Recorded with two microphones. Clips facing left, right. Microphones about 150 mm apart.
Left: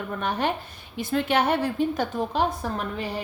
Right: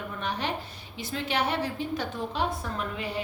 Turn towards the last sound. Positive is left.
turn(degrees=45)  # may be behind; listen again after turning